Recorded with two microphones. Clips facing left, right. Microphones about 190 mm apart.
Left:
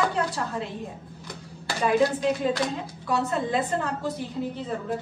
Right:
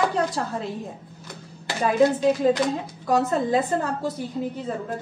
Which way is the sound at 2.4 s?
45° right (ahead or behind).